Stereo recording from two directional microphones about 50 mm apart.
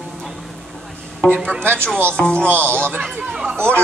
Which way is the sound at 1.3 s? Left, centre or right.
Right.